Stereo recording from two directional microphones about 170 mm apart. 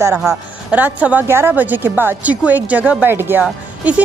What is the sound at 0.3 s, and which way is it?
A woman's voice, 10° right (ahead or behind).